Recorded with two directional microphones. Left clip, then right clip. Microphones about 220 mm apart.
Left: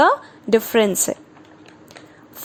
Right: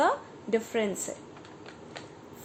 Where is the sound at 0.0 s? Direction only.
40° left (ahead or behind).